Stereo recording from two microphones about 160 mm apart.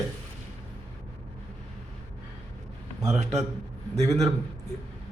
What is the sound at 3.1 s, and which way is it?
Speech, 45° right (ahead or behind).